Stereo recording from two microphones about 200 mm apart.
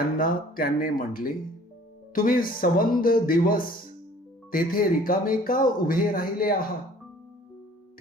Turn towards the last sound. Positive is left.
turn(degrees=45)  # may be behind; listen again after turning